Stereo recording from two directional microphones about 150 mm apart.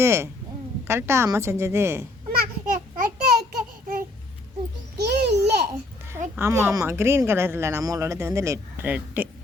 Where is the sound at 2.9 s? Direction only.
90° right.